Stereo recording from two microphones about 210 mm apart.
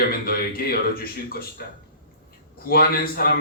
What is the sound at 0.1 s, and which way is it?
A man's voice, 45° left (ahead or behind).